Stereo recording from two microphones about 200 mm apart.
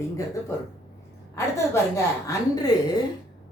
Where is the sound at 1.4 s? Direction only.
15° left (ahead or behind).